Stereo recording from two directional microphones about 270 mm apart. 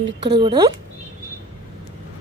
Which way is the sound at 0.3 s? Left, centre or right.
Centre.